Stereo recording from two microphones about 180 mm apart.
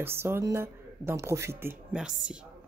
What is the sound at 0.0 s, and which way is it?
Speech, 10° right (ahead or behind).